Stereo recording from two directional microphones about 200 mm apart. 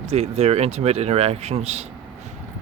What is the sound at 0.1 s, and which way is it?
Speech, 30° right (ahead or behind).